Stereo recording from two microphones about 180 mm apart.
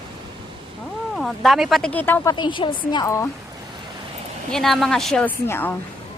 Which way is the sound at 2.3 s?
25° left (ahead or behind).